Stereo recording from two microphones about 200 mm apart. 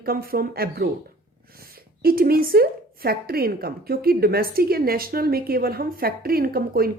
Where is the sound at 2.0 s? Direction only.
50° right (ahead or behind).